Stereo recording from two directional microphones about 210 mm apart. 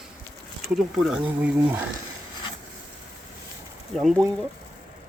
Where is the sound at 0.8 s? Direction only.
Centre (ahead or behind).